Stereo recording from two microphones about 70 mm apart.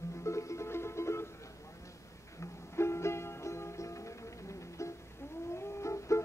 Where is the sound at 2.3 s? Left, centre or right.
Left.